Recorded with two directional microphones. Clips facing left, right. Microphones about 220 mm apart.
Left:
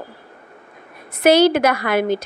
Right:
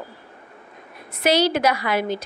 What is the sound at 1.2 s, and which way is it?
Speech, 50° left (ahead or behind).